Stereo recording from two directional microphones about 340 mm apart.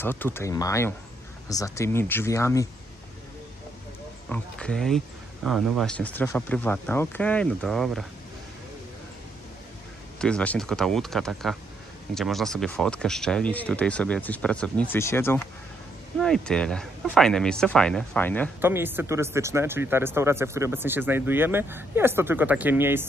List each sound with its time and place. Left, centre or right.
0.0 s speech: centre
4.3 s speech: centre
10.1 s speech: centre
18.6 s speech: centre